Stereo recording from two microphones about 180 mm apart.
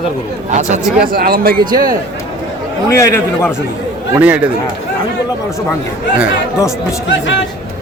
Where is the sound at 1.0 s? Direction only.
55° right (ahead or behind).